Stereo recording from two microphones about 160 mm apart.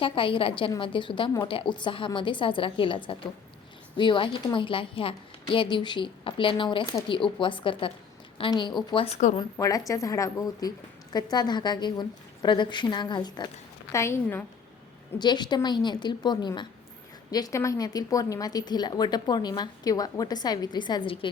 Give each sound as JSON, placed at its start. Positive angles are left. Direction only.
{"t": 0.0, "sound": "a woman's voice", "side_deg": 35}
{"t": 15.2, "sound": "a woman's voice", "side_deg": 25}